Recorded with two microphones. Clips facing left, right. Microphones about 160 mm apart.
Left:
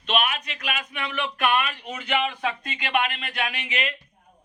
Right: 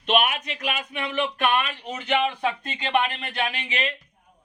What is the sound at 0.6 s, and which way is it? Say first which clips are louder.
Speech: right 2 dB; 35° right (ahead or behind).